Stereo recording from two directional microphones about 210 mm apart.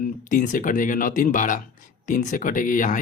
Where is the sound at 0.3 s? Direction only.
40° left (ahead or behind).